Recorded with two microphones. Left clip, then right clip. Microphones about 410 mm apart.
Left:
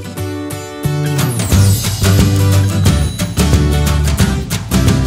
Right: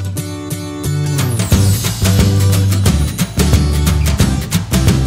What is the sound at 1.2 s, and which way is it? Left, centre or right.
Music, centre.